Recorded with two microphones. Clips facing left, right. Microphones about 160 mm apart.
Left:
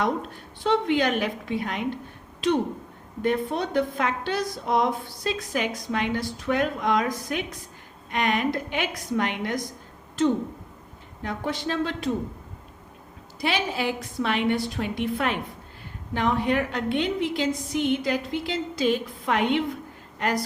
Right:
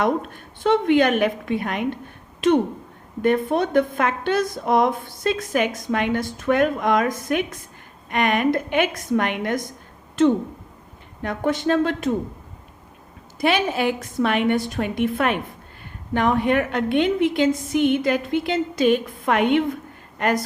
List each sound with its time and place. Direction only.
0.0 s a woman's voice: 55° right (ahead or behind)
3.2 s a woman's voice: 55° right (ahead or behind)
13.4 s a woman's voice: 55° right (ahead or behind)